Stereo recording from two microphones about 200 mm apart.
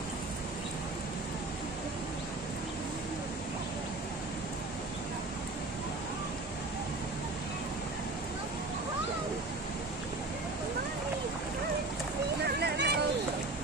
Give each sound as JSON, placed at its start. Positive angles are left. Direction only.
{"t": 12.4, "sound": "music", "side_deg": -55}